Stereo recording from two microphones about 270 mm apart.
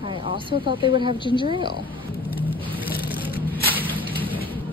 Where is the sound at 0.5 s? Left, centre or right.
Centre.